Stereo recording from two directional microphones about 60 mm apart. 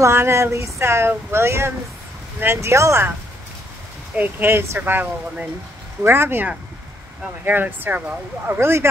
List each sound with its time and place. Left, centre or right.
0.0 s speech: right
4.2 s speech: right
7.4 s speech: right
8.5 s speech: right